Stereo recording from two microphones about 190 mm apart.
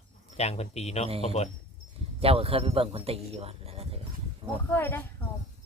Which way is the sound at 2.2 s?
30° right (ahead or behind).